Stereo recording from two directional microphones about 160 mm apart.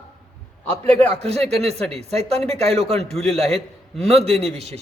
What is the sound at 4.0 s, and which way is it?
Speech, 40° right (ahead or behind).